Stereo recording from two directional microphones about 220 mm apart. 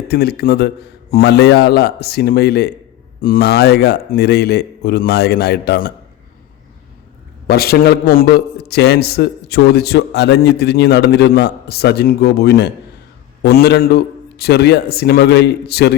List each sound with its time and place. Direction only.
0.1 s a man's voice: 45° left (ahead or behind)
7.4 s a man's voice: 45° left (ahead or behind)